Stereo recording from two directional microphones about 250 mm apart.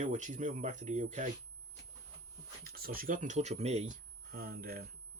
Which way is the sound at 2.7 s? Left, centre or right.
Right.